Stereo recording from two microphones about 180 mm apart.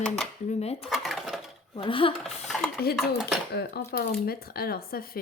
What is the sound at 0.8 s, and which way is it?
Speech, centre (ahead or behind).